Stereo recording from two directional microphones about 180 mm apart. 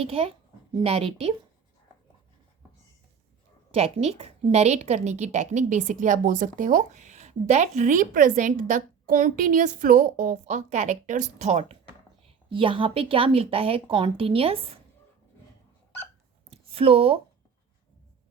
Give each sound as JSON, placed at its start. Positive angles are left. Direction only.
{"t": 0.0, "sound": "speech", "side_deg": -30}
{"t": 3.7, "sound": "a woman's voice", "side_deg": -35}
{"t": 12.5, "sound": "speech", "side_deg": -30}
{"t": 16.5, "sound": "a sound", "side_deg": -35}